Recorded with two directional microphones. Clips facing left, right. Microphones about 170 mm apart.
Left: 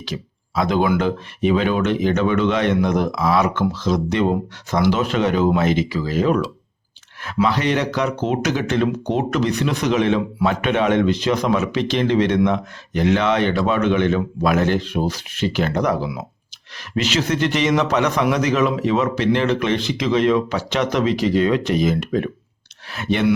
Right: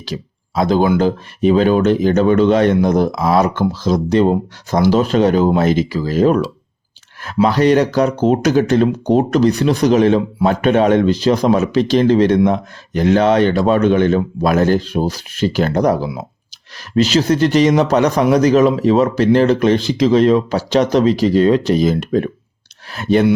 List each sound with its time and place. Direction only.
0.0 s speech: 35° right (ahead or behind)